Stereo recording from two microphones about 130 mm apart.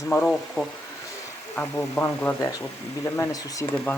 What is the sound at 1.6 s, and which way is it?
Speech, 20° left (ahead or behind).